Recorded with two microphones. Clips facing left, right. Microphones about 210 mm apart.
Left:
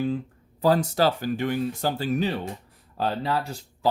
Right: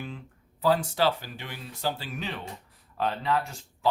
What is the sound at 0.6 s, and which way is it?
Speech, 40° left (ahead or behind).